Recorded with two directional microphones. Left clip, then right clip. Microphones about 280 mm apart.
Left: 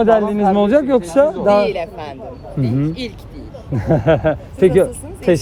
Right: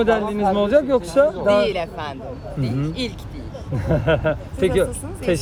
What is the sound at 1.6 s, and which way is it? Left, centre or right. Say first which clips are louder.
Speech: left 2 dB; centre.